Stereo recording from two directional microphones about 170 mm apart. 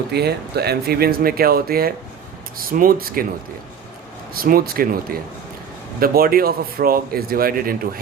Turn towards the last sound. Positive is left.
turn(degrees=-60)  # may be behind; listen again after turning